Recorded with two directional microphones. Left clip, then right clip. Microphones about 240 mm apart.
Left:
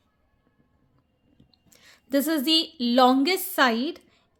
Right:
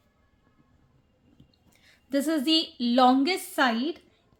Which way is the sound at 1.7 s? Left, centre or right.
Left.